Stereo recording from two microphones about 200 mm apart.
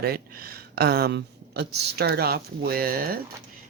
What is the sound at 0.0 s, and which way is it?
Speech, 50° right (ahead or behind).